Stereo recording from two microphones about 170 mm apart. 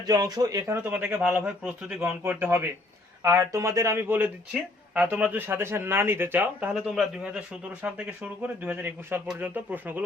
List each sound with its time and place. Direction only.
0.0 s speech: 20° right (ahead or behind)
0.8 s speech: 10° right (ahead or behind)
6.7 s speech: centre (ahead or behind)